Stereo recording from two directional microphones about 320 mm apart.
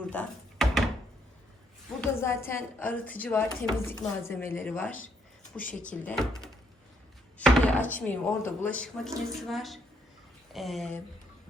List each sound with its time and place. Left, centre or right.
0.0 s door: centre
2.0 s speech: centre
4.9 s a sound: left
5.9 s speech: centre